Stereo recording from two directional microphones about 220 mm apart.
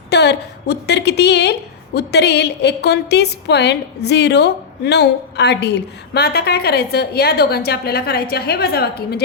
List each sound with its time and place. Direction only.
0.1 s a woman's voice: 50° left (ahead or behind)